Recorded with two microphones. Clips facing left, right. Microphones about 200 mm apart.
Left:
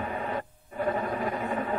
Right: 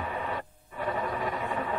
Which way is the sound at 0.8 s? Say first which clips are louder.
Left 2 dB; 40° left (ahead or behind).